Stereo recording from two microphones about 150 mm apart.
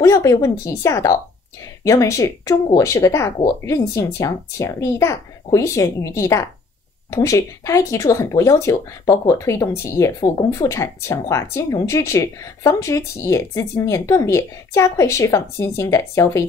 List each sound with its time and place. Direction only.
0.0 s speech: 20° left (ahead or behind)